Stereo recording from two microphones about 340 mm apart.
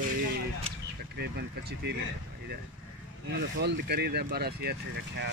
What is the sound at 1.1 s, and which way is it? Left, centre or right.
Speech, right.